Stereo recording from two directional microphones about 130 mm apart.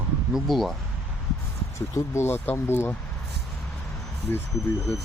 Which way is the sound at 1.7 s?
20° left (ahead or behind).